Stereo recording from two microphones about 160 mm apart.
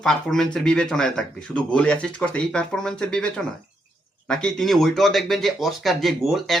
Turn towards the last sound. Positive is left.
turn(degrees=0)  # may be behind; listen again after turning